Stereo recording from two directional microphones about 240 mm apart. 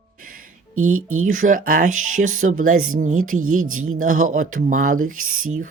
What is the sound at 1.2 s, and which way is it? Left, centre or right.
Speech, right.